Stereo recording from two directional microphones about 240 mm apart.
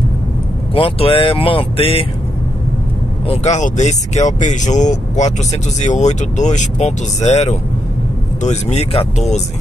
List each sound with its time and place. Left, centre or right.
0.7 s speech: left
3.3 s speech: left